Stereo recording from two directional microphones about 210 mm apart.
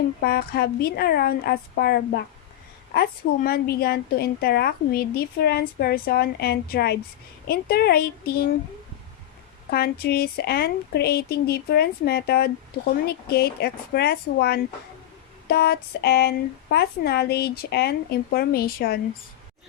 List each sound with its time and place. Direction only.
0.2 s speech: 45° left (ahead or behind)
9.6 s speech: 50° left (ahead or behind)